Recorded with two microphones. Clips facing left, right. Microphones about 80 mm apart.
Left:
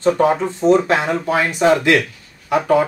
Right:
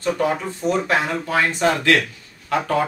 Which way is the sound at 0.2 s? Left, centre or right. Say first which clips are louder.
Left 6 dB; left.